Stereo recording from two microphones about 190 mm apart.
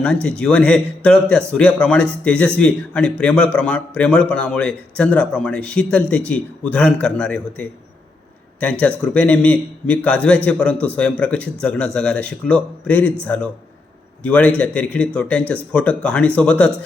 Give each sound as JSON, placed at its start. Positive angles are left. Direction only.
{"t": 0.0, "sound": "a man's voice", "side_deg": 5}
{"t": 9.1, "sound": "a man's voice", "side_deg": 5}